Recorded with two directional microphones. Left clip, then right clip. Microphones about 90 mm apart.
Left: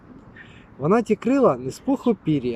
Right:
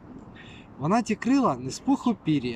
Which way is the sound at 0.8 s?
30° right (ahead or behind).